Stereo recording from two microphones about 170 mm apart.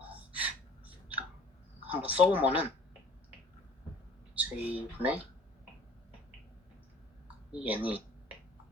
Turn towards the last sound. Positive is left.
turn(degrees=-10)  # may be behind; listen again after turning